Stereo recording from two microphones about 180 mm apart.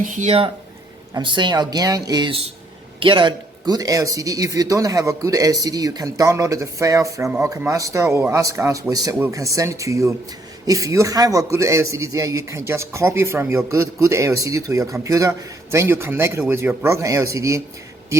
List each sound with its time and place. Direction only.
0.0 s speech: 45° right (ahead or behind); by 17.6 s 15° right (ahead or behind)